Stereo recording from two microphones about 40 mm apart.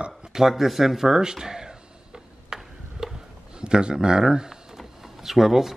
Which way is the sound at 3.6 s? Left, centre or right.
Right.